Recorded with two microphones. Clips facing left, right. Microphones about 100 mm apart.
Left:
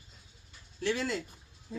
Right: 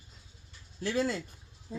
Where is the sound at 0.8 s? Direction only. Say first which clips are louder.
Right 1 dB; 35° right (ahead or behind).